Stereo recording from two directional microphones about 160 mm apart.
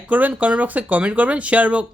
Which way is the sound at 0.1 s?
10° right (ahead or behind).